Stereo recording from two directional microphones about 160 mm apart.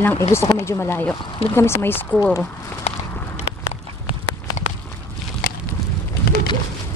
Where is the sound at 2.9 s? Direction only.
40° left (ahead or behind).